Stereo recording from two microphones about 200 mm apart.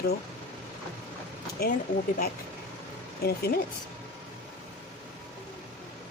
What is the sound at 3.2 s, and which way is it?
Speech, 50° left (ahead or behind).